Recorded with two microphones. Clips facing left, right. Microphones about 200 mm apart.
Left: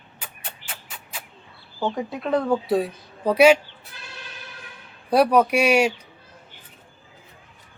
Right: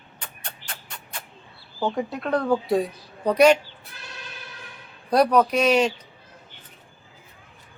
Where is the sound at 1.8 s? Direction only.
Centre (ahead or behind).